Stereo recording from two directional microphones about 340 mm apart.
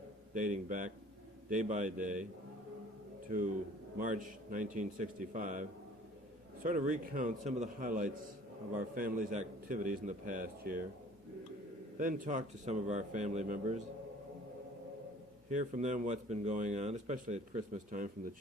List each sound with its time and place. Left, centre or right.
0.3 s speech: right
3.9 s speech: right
11.9 s speech: right
15.4 s speech: right